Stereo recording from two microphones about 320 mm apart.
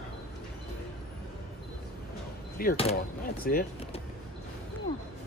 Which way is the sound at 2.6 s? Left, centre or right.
Left.